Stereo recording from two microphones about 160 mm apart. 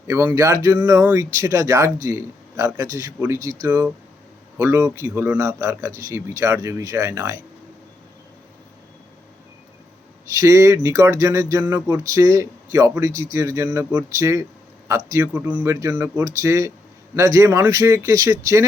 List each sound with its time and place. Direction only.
0.1 s a man's voice: 20° right (ahead or behind)
10.2 s a man's voice: 20° right (ahead or behind)